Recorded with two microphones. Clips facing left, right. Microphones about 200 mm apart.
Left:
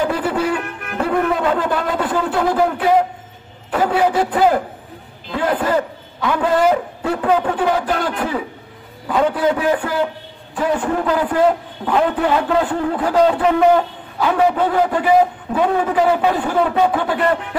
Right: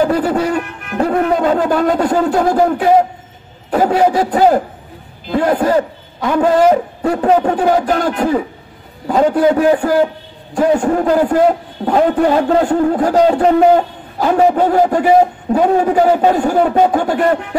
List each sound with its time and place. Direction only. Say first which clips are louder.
0.0 s music: right 5 dB; 45° right (ahead or behind)
0.9 s a man's voice: right 4 dB; 40° right (ahead or behind)